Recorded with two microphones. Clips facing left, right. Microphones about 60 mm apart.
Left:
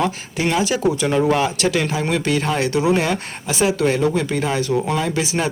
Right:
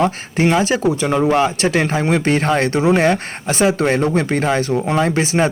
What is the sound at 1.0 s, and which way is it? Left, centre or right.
Speech, right.